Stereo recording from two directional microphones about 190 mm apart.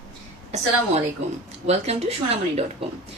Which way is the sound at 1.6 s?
35° right (ahead or behind).